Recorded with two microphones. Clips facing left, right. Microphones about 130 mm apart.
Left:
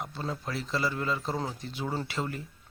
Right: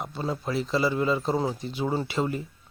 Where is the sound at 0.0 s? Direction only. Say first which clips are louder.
Right 5 dB; 15° right (ahead or behind).